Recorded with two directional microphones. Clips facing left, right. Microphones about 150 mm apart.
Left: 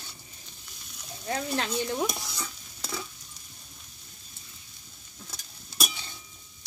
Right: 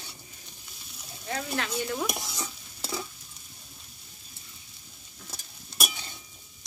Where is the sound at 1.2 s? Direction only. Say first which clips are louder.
Left 2 dB; 30° left (ahead or behind).